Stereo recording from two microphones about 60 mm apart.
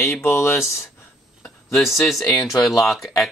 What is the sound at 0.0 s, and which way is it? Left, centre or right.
Speech, left.